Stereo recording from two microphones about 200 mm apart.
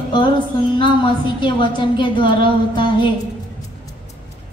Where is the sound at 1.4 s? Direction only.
25° left (ahead or behind).